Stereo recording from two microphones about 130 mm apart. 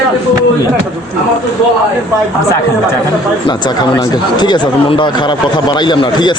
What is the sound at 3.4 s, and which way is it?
Speech, 35° left (ahead or behind).